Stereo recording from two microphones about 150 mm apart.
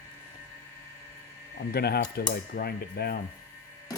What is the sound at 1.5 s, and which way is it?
Speech, 90° left.